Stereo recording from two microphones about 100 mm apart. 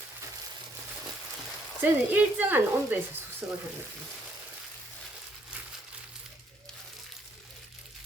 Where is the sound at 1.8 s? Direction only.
20° right (ahead or behind).